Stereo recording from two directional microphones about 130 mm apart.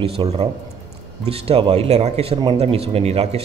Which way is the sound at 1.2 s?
50° right (ahead or behind).